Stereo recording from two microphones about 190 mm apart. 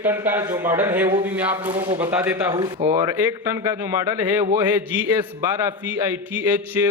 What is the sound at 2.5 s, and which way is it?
Speech, 25° right (ahead or behind).